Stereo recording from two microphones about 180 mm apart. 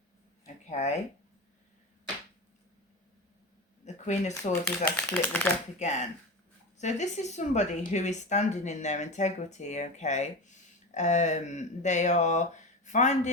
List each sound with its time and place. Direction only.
0.4 s a sound: 40° left (ahead or behind)
3.8 s speech: 40° left (ahead or behind)
4.9 s speech: 10° left (ahead or behind)
5.8 s a woman's voice: 40° left (ahead or behind)